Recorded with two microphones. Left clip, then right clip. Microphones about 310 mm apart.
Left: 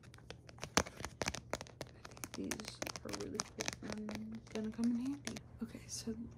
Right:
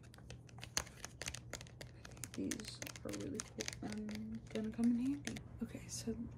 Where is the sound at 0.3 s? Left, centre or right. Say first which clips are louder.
Left 8 dB; centre.